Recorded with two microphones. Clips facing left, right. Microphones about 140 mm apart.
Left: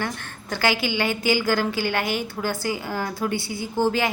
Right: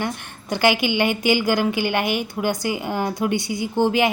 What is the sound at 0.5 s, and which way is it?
A woman's voice, 15° right (ahead or behind).